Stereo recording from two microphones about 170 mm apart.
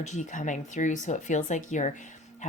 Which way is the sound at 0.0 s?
45° left (ahead or behind).